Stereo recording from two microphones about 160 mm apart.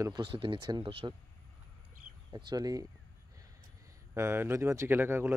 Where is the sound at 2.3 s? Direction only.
25° right (ahead or behind).